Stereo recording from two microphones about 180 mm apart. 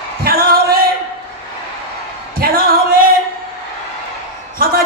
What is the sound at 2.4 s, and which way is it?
Singing, 55° right (ahead or behind).